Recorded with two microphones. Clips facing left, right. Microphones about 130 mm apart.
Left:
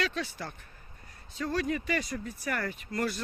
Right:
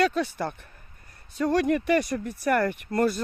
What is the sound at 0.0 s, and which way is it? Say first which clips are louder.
Speech: right 9 dB; 55° right (ahead or behind).